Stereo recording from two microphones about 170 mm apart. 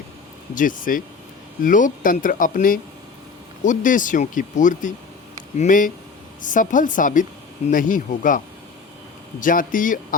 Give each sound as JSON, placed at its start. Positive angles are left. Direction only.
{"t": 0.5, "sound": "speech", "side_deg": 50}
{"t": 9.4, "sound": "speech", "side_deg": 50}